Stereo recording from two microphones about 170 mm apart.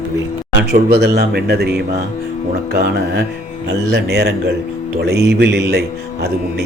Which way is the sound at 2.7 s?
70° right (ahead or behind).